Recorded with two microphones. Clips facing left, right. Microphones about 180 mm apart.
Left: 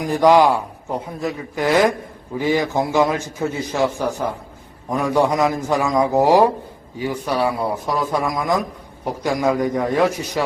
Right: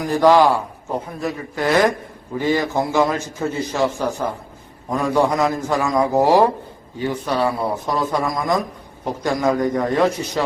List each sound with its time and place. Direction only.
0.2 s a man's voice: 15° left (ahead or behind)